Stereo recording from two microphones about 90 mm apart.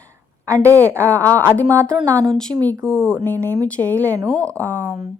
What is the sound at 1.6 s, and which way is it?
Speech, 30° right (ahead or behind).